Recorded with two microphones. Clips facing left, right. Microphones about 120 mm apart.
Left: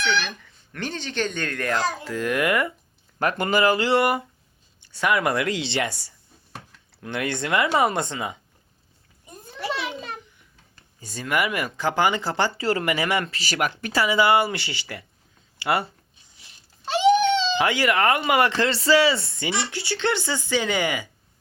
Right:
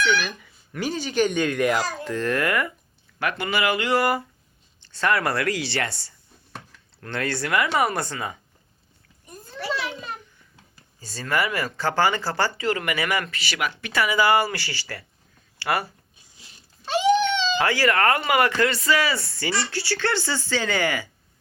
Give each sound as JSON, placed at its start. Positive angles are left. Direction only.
{"t": 0.0, "sound": "speech", "side_deg": -5}
{"t": 2.0, "sound": "speech", "side_deg": 10}
{"t": 3.2, "sound": "speech", "side_deg": 45}
{"t": 4.8, "sound": "speech", "side_deg": 10}
{"t": 9.2, "sound": "a sound", "side_deg": 20}
{"t": 11.0, "sound": "speech", "side_deg": 15}
{"t": 12.5, "sound": "speech", "side_deg": 30}
{"t": 13.9, "sound": "speech", "side_deg": 25}
{"t": 17.0, "sound": "a sound", "side_deg": 30}
{"t": 17.6, "sound": "speech", "side_deg": 20}